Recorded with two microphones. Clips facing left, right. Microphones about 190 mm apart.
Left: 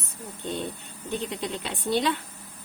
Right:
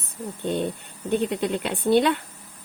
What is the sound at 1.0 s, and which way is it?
Speech, 55° right (ahead or behind).